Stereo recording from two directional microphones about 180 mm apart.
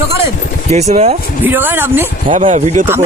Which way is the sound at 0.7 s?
40° right (ahead or behind).